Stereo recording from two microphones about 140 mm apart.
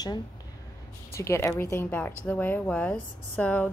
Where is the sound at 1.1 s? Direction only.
20° left (ahead or behind).